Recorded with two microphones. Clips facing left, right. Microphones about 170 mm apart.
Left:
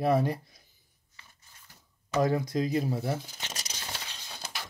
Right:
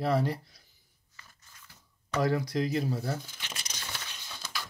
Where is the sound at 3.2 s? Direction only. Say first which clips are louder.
Left 3 dB; 40° left (ahead or behind).